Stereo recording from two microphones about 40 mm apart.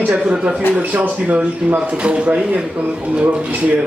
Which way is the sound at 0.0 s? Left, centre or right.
Right.